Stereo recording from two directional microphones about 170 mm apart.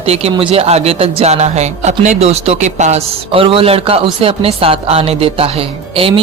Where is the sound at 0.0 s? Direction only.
35° right (ahead or behind).